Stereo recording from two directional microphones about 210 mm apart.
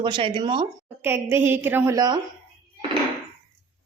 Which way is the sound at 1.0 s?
10° right (ahead or behind).